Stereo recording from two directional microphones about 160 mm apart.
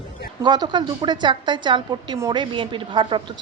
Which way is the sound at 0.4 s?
25° right (ahead or behind).